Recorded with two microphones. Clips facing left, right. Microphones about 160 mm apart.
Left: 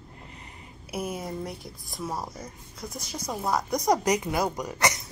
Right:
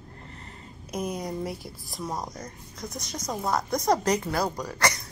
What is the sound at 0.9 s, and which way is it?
Speech, 5° left (ahead or behind).